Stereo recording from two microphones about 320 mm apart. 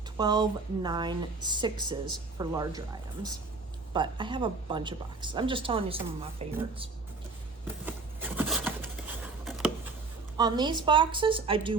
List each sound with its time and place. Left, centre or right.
0.2 s speech: centre
7.9 s patter: centre
10.3 s speech: centre